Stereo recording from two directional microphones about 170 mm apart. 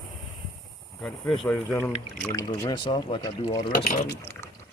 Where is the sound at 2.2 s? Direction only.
20° left (ahead or behind).